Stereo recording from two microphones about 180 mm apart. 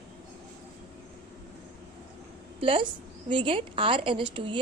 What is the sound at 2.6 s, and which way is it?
Speech, 30° right (ahead or behind).